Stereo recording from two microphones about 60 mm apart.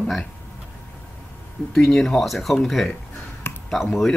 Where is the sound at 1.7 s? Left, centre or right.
Centre.